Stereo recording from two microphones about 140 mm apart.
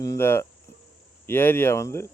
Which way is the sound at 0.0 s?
20° left (ahead or behind).